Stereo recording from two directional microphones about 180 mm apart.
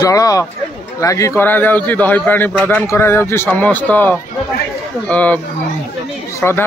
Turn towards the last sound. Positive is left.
turn(degrees=15)  # may be behind; listen again after turning